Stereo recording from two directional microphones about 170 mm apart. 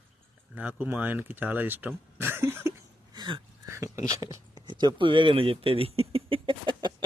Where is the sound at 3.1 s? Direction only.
25° right (ahead or behind).